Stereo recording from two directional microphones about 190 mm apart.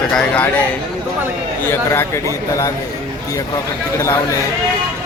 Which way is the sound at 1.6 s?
15° left (ahead or behind).